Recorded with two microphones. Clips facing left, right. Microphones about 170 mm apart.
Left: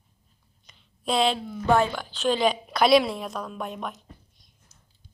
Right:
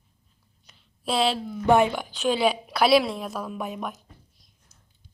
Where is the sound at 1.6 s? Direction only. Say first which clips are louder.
Right 2 dB; 15° right (ahead or behind).